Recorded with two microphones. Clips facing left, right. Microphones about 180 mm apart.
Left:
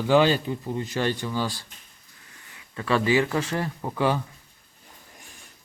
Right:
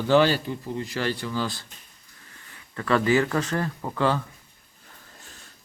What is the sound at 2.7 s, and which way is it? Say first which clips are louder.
Speech: right 1 dB; 15° left (ahead or behind).